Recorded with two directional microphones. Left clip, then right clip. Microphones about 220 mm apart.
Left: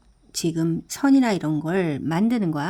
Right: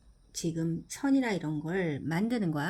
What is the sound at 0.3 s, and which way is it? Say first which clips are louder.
Speech: left 10 dB; 35° left (ahead or behind).